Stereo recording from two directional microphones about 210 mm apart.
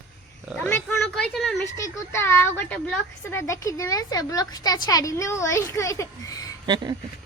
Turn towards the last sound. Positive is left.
turn(degrees=-20)  # may be behind; listen again after turning